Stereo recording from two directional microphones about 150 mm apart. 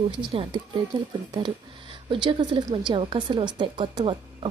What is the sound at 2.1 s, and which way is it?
A woman's voice, 35° right (ahead or behind).